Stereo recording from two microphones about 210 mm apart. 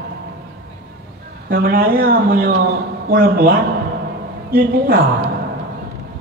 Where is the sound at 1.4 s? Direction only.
45° right (ahead or behind).